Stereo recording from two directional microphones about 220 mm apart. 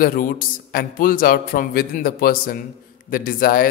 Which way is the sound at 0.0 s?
40° left (ahead or behind).